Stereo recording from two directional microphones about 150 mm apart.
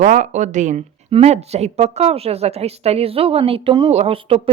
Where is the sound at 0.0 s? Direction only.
55° right (ahead or behind).